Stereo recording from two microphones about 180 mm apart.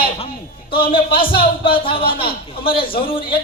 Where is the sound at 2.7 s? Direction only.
30° left (ahead or behind).